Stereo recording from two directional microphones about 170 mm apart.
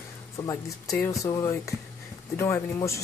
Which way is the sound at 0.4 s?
15° left (ahead or behind).